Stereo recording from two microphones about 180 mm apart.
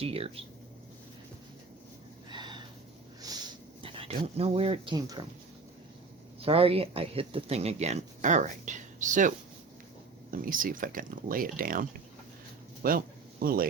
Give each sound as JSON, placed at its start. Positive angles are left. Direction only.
{"t": 0.0, "sound": "speech", "side_deg": -30}
{"t": 2.3, "sound": "a sound", "side_deg": -25}
{"t": 4.4, "sound": "speech", "side_deg": -35}
{"t": 4.9, "sound": "speech", "side_deg": -20}
{"t": 6.4, "sound": "speech", "side_deg": -30}
{"t": 10.3, "sound": "speech", "side_deg": -50}